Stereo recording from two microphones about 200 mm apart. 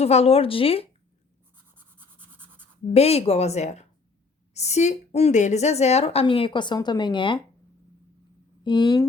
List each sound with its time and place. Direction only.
0.0 s speech: 30° left (ahead or behind)
2.0 s toothbrush: 10° right (ahead or behind)
2.9 s a woman's voice: 30° left (ahead or behind)
8.6 s speech: 25° left (ahead or behind)